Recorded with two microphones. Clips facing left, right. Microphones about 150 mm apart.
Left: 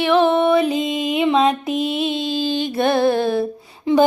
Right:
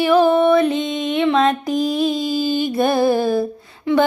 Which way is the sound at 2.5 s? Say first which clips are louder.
Even; 5° right (ahead or behind).